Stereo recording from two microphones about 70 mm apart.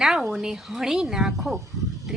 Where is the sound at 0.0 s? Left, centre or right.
Centre.